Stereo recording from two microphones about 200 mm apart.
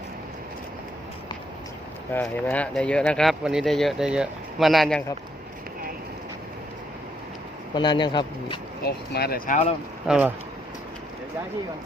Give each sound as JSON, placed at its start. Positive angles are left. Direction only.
{"t": 2.1, "sound": "speech", "side_deg": 5}
{"t": 7.7, "sound": "speech", "side_deg": 20}
{"t": 8.8, "sound": "speech", "side_deg": 50}
{"t": 10.1, "sound": "speech", "side_deg": -5}